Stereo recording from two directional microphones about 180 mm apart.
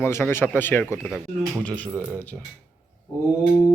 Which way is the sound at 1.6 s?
10° left (ahead or behind).